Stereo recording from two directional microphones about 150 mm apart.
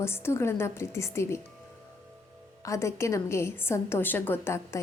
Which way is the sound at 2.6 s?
20° left (ahead or behind).